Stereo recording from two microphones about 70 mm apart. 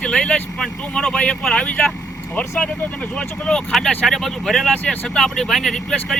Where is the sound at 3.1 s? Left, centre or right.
Centre.